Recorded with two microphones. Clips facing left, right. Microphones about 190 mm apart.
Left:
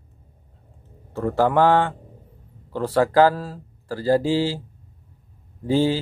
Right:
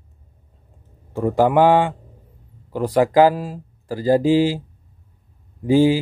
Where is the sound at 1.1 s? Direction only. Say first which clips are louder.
Right 3 dB; 15° right (ahead or behind).